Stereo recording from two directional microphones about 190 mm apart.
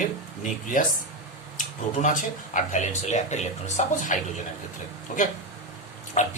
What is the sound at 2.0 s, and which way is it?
Speech, 40° left (ahead or behind).